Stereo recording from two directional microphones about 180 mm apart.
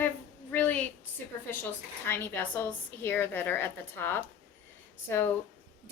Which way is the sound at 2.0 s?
15° left (ahead or behind).